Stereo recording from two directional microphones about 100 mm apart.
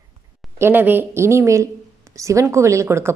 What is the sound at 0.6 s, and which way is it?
A woman's voice, 20° right (ahead or behind).